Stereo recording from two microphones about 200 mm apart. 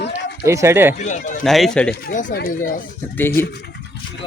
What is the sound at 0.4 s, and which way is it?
Speech, 15° right (ahead or behind).